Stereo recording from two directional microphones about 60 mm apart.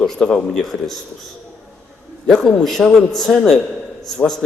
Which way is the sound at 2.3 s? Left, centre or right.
Centre.